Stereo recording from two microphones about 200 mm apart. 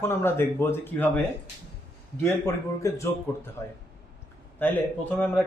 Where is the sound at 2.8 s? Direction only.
15° left (ahead or behind).